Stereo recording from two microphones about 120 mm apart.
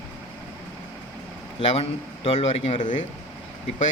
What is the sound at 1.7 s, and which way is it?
Speech, 60° left (ahead or behind).